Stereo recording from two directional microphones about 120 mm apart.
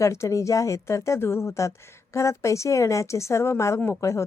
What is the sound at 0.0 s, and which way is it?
Speech, 25° left (ahead or behind).